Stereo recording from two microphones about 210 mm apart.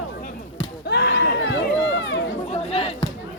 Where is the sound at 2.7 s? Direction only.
30° left (ahead or behind).